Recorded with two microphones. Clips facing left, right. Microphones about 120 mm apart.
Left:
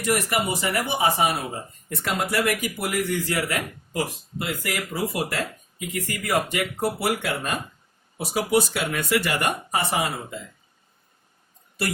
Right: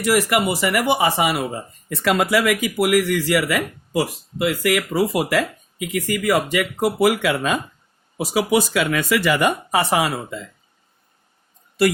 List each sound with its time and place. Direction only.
0.0 s speech: 90° right